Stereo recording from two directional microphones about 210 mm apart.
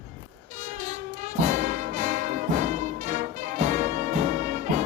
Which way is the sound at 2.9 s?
35° right (ahead or behind).